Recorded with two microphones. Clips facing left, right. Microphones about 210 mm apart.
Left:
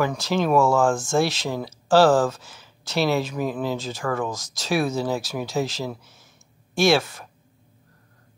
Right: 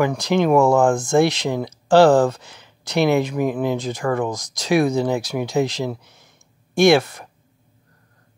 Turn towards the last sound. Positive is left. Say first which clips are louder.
# right 5 dB
turn(degrees=-15)  # may be behind; listen again after turning